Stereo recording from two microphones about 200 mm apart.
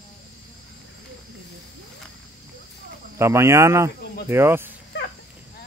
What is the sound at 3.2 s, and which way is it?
Speech, 15° right (ahead or behind).